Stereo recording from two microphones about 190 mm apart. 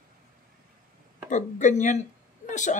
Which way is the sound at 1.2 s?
40° left (ahead or behind).